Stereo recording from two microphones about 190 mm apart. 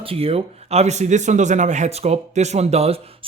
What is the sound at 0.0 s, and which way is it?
A man's voice, 30° right (ahead or behind).